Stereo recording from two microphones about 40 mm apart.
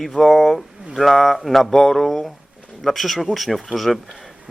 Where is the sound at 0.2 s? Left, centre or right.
Centre.